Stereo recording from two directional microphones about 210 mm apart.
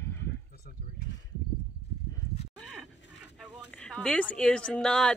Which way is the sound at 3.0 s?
60° left (ahead or behind).